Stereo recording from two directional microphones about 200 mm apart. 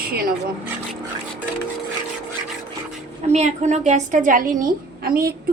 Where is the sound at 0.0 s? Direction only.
50° right (ahead or behind).